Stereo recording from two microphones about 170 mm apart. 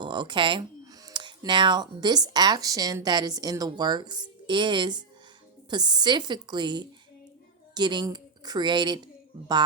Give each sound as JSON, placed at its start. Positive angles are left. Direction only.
{"t": 0.0, "sound": "a woman's voice", "side_deg": -25}